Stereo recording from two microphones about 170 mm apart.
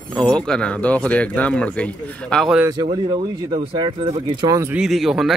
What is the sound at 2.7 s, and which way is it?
Speech, 20° right (ahead or behind).